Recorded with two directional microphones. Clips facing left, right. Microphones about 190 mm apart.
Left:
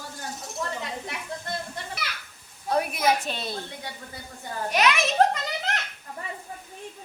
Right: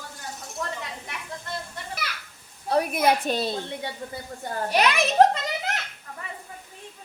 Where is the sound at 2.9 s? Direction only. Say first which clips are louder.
Right 3 dB; 55° right (ahead or behind).